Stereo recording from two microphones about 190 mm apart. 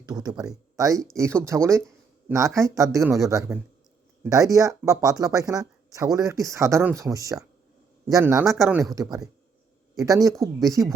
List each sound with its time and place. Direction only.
0.0 s speech: 20° right (ahead or behind)